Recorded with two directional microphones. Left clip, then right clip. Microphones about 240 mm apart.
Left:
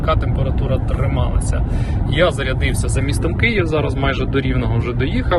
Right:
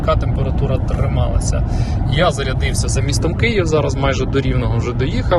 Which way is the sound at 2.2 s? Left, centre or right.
Centre.